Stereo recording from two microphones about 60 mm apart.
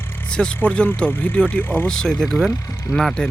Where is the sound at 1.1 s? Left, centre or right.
Left.